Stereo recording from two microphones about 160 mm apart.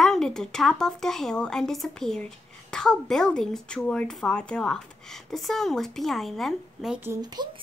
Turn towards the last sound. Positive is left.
turn(degrees=-25)  # may be behind; listen again after turning